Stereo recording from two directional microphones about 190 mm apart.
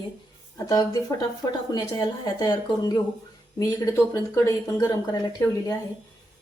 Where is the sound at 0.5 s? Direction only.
20° left (ahead or behind).